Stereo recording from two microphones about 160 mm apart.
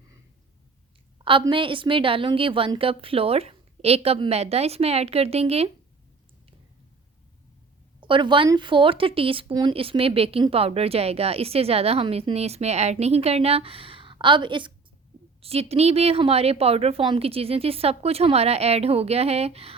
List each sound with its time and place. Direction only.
1.2 s speech: 35° right (ahead or behind)
8.0 s speech: 30° right (ahead or behind)